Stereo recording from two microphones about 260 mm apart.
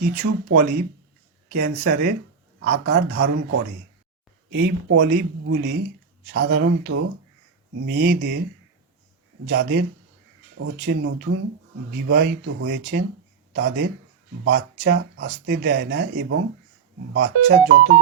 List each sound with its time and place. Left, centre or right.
0.2 s speech: right
4.5 s speech: right
9.5 s speech: right